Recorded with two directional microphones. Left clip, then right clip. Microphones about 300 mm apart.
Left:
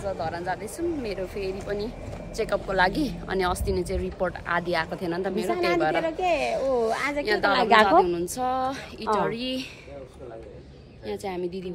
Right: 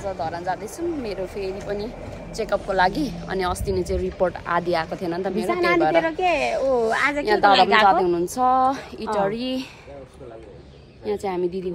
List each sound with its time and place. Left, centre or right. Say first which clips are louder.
0.0 s speech: right 3 dB; centre
6.0 s speech: right 3 dB; right
7.2 s speech: right 5 dB; centre
11.2 s speech: right 5 dB; centre